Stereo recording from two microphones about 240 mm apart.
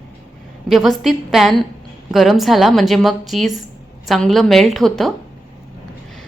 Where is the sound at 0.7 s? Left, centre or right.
Centre.